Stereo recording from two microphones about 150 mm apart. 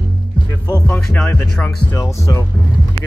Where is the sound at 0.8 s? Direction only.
10° left (ahead or behind).